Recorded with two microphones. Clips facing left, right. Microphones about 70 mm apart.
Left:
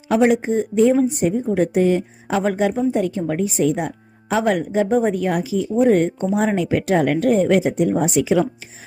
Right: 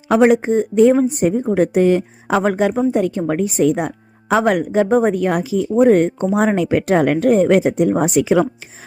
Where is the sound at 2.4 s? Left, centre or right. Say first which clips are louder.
Right 1 dB; right.